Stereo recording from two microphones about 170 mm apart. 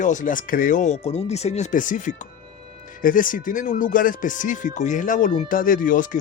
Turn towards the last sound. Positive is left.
turn(degrees=55)  # may be behind; listen again after turning